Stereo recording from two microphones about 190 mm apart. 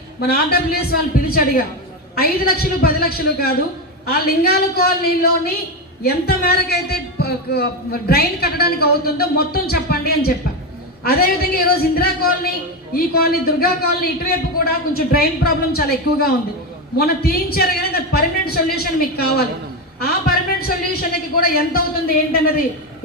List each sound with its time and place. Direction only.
0.2 s a man's voice: 55° left (ahead or behind)
2.1 s a man's voice: 50° left (ahead or behind)